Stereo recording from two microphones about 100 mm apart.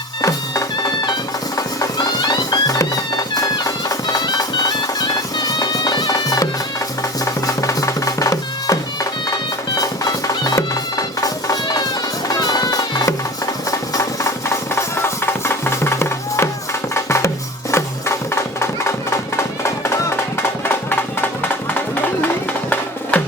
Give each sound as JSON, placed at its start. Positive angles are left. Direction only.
{"t": 0.2, "sound": "music", "side_deg": 35}
{"t": 5.5, "sound": "bagpipes", "side_deg": 40}
{"t": 7.3, "sound": "music", "side_deg": 30}